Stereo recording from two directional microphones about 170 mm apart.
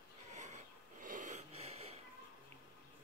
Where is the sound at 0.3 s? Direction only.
45° right (ahead or behind).